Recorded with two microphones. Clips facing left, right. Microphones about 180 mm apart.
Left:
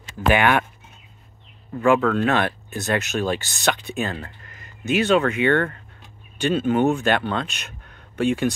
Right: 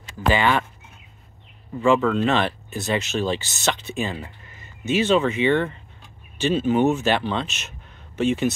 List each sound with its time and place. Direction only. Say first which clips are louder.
0.3 s speech: left 2 dB; 15° left (ahead or behind)
1.8 s speech: left 1 dB; centre (ahead or behind)